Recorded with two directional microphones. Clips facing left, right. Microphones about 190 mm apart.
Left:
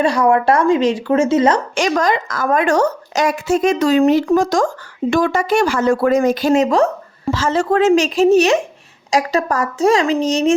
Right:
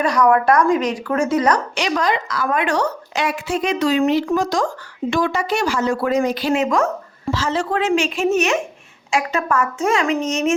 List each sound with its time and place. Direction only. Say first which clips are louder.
0.0 s a woman's voice: left 2 dB; 30° left (ahead or behind)
1.7 s a woman's voice: left 4 dB; 45° left (ahead or behind)
7.3 s a woman's voice: left 5 dB; 45° left (ahead or behind)